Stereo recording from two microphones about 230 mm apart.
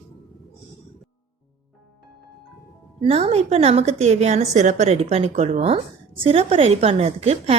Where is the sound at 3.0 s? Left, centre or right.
Right.